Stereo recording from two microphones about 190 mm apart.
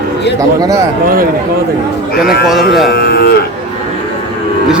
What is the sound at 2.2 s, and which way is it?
Speech, 55° left (ahead or behind).